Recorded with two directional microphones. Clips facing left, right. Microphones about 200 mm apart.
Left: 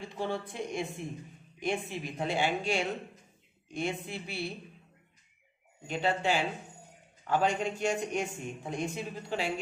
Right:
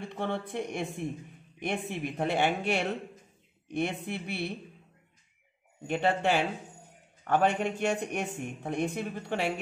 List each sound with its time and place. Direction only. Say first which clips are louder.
0.0 s speech: right 1 dB; 60° right (ahead or behind)
5.9 s a man's voice: right 3 dB; 55° right (ahead or behind)